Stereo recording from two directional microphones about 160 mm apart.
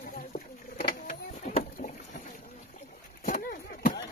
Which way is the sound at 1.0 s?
55° left (ahead or behind).